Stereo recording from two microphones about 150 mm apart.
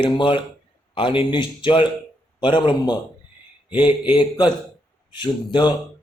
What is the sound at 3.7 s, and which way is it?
Speech, 10° right (ahead or behind).